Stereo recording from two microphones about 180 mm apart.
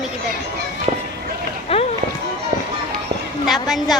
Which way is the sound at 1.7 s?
35° left (ahead or behind).